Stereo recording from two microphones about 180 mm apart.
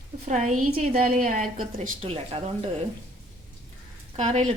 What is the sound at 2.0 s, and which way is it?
Speech, 35° right (ahead or behind).